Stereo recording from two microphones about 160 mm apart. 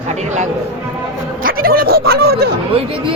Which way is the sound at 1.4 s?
65° right (ahead or behind).